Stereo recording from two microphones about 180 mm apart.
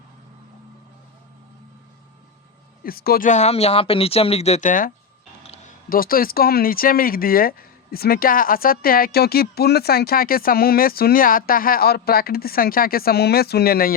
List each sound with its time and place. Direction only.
2.8 s speech: 55° left (ahead or behind)
5.4 s a sound: 35° left (ahead or behind)
5.9 s speech: 55° left (ahead or behind)